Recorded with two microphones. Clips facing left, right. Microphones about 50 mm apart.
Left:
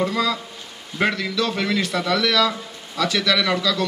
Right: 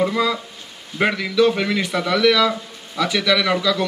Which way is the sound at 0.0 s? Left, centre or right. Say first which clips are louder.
Right 2 dB; centre.